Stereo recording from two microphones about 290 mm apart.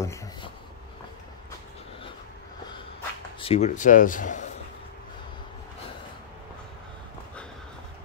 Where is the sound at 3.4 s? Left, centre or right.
Left.